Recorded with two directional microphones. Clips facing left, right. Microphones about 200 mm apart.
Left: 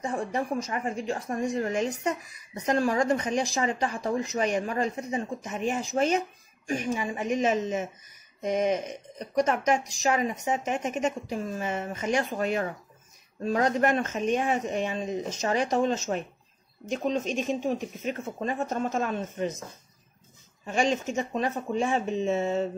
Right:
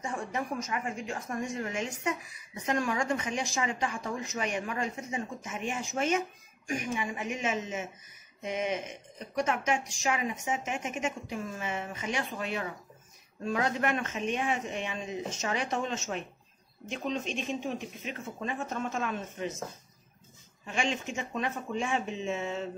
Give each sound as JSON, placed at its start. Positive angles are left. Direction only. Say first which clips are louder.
{"t": 0.0, "sound": "a woman's voice", "louder": "left 5 dB", "side_deg": 35}
{"t": 20.6, "sound": "a woman's voice", "louder": "left 6 dB", "side_deg": 40}